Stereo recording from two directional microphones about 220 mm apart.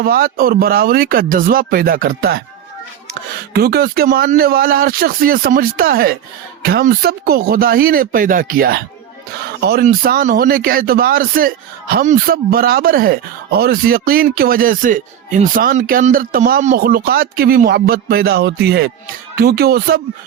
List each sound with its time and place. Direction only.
0.0 s a man's voice: 40° right (ahead or behind)
3.5 s a man's voice: 45° right (ahead or behind)